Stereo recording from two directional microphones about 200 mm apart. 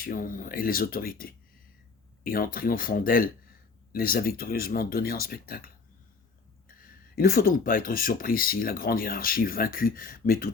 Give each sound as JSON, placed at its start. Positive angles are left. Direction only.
{"t": 0.0, "sound": "speech", "side_deg": 45}
{"t": 7.2, "sound": "speech", "side_deg": 45}